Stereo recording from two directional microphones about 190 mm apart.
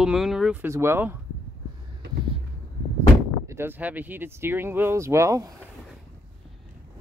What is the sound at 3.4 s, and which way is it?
Speech, 10° right (ahead or behind).